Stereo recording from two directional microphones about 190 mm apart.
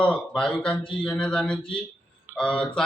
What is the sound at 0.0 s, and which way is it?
A man's voice, 5° left (ahead or behind).